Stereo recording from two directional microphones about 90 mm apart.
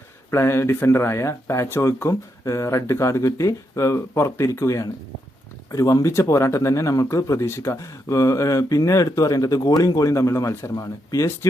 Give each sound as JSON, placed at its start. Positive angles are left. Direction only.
{"t": 0.3, "sound": "speech", "side_deg": 30}